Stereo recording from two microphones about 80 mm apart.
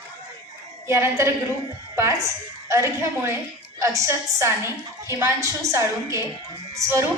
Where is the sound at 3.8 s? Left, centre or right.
Right.